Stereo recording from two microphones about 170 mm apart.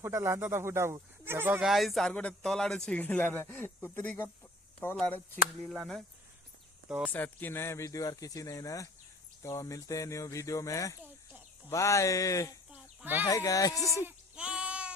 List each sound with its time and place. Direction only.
0.0 s speech: 15° right (ahead or behind)
1.6 s speech: centre (ahead or behind)
5.7 s speech: 5° right (ahead or behind)
7.1 s speech: 10° left (ahead or behind)
12.7 s a sound: 10° right (ahead or behind)
13.2 s speech: 20° left (ahead or behind)
14.0 s a sound: 5° right (ahead or behind)